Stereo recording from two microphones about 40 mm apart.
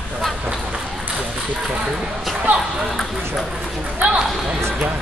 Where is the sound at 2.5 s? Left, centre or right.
Right.